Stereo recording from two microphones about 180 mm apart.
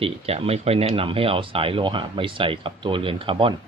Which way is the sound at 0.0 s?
35° right (ahead or behind).